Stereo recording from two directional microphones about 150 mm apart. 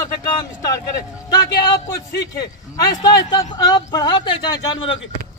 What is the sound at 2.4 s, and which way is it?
Speech, 25° left (ahead or behind).